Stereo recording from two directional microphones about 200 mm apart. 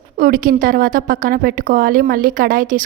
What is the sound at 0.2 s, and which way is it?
A woman's voice, 45° right (ahead or behind).